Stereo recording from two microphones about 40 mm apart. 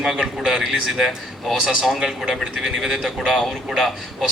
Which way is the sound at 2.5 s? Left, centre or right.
Centre.